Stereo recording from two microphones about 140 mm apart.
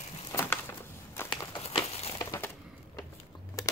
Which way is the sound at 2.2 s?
20° left (ahead or behind).